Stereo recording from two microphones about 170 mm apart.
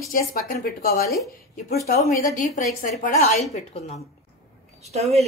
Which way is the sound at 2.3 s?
50° left (ahead or behind).